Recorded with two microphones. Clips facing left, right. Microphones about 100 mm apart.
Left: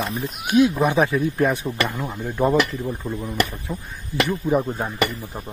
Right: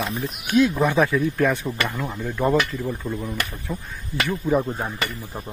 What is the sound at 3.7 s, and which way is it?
Speech, 5° left (ahead or behind).